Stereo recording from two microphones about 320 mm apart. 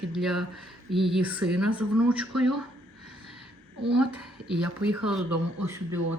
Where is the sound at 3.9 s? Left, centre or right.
Centre.